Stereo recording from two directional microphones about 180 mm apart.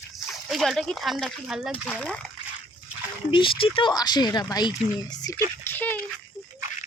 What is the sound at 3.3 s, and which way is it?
Speech, 30° left (ahead or behind).